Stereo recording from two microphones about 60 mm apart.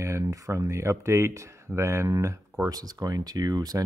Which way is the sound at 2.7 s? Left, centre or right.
Right.